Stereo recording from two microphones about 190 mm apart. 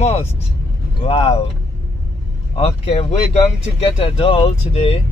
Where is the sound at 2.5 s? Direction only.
30° left (ahead or behind).